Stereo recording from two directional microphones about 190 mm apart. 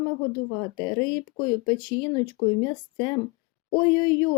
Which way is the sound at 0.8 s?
25° left (ahead or behind).